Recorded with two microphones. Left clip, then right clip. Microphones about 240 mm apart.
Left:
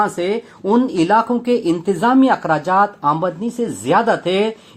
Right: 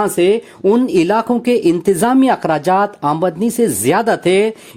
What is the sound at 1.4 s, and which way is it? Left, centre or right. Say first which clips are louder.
Speech: right 3 dB; right.